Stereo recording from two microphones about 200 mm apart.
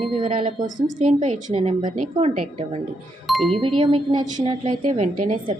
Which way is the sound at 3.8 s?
25° right (ahead or behind).